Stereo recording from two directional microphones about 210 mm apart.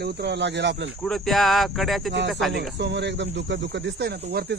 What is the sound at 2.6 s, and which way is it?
Speech, 55° right (ahead or behind).